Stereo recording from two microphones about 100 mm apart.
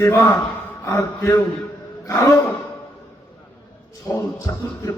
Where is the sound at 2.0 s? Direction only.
35° left (ahead or behind).